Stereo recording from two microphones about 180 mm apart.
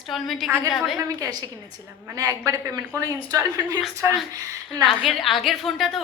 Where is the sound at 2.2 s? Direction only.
20° right (ahead or behind).